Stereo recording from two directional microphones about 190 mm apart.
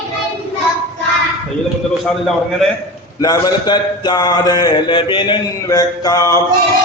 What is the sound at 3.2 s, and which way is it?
A man's voice, 20° left (ahead or behind).